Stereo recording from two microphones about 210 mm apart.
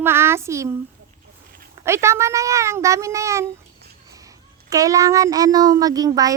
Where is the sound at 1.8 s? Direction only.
15° right (ahead or behind).